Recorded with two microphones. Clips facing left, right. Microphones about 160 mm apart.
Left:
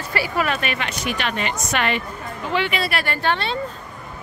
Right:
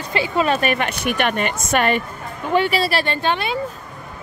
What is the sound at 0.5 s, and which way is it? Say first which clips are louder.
A woman's voice: right 6 dB; 45° right (ahead or behind).